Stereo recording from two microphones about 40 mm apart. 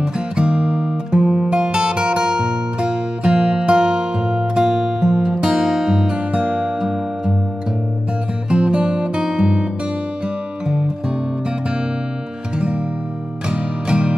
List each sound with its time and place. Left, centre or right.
0.0 s music: right
6.4 s music: right
8.5 s music: right
13.5 s music: right